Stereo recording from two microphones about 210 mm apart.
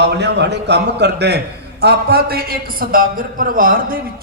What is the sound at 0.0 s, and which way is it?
A man's voice, 55° right (ahead or behind).